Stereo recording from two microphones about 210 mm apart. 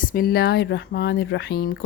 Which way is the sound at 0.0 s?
40° left (ahead or behind).